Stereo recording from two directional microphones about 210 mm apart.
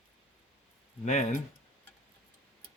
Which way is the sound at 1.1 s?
35° left (ahead or behind).